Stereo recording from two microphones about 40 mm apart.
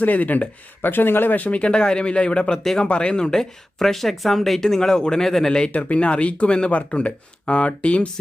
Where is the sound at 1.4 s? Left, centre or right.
Left.